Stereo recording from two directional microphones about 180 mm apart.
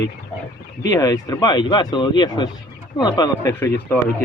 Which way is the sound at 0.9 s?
20° left (ahead or behind).